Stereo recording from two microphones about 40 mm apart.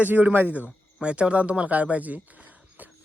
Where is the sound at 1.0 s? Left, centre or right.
Right.